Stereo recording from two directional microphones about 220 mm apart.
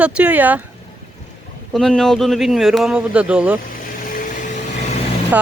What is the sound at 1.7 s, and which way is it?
Speech, centre (ahead or behind).